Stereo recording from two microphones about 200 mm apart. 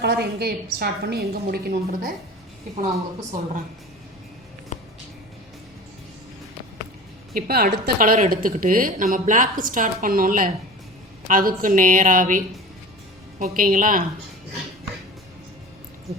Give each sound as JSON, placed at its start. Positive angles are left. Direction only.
{"t": 0.0, "sound": "a woman's voice", "side_deg": -55}
{"t": 4.7, "sound": "music", "side_deg": 35}
{"t": 7.3, "sound": "a woman's voice", "side_deg": -50}
{"t": 13.6, "sound": "a woman's voice", "side_deg": -45}